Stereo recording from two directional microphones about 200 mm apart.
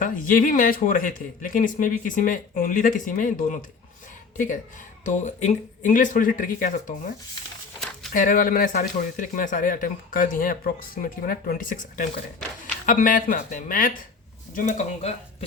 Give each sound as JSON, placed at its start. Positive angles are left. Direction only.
{"t": 0.0, "sound": "speech", "side_deg": 45}
{"t": 8.1, "sound": "speech", "side_deg": 45}